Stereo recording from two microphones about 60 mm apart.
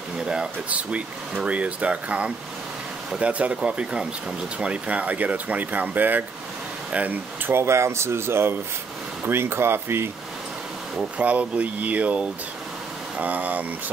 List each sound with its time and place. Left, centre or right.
0.2 s speech: centre
0.7 s speech: right
7.4 s speech: right
11.1 s speech: right